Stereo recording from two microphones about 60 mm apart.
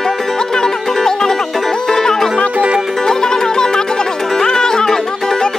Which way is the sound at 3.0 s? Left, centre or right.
Centre.